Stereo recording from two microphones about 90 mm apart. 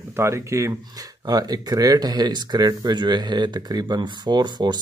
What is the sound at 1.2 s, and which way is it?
A man's voice, 50° right (ahead or behind).